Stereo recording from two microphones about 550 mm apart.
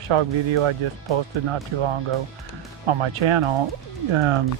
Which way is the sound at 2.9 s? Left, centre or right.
Right.